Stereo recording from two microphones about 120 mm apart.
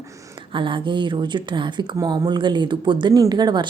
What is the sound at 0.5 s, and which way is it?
Speech, 45° right (ahead or behind).